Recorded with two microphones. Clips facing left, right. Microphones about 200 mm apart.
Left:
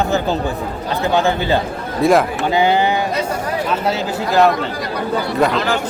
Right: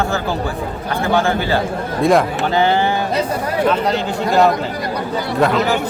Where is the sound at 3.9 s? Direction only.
Centre (ahead or behind).